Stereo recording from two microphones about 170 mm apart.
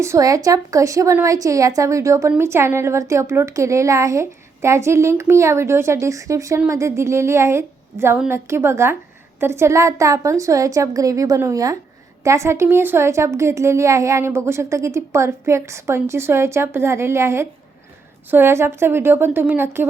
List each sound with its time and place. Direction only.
0.0 s a woman's voice: 20° right (ahead or behind)